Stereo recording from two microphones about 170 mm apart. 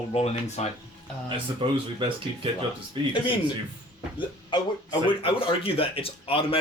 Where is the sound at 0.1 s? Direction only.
40° left (ahead or behind).